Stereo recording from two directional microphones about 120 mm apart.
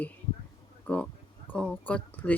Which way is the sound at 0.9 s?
10° left (ahead or behind).